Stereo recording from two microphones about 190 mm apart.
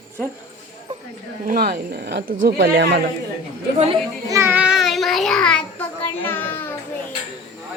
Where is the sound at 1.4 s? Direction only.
55° right (ahead or behind).